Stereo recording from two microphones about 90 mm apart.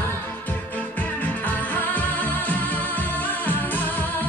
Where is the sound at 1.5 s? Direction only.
20° left (ahead or behind).